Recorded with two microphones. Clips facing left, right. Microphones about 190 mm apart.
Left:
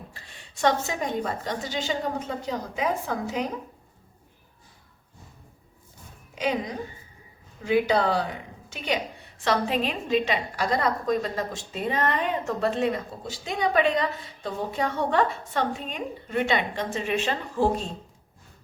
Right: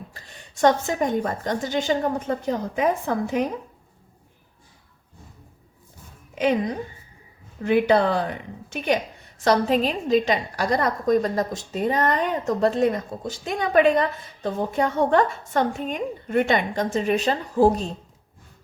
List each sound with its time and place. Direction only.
0.1 s a woman's voice: 45° right (ahead or behind)
6.3 s a woman's voice: 55° right (ahead or behind)
7.6 s speech: 55° right (ahead or behind)
9.4 s a woman's voice: 40° right (ahead or behind)